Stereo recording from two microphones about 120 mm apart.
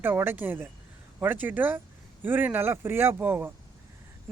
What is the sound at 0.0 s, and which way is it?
Speech, 20° right (ahead or behind).